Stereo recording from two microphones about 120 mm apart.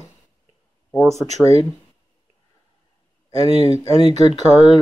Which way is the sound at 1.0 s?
25° right (ahead or behind).